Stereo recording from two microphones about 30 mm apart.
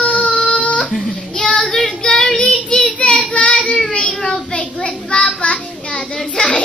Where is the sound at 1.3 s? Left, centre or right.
Left.